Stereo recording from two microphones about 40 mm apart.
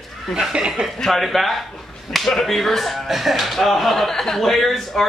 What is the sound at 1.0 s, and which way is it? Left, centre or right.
Speech, centre.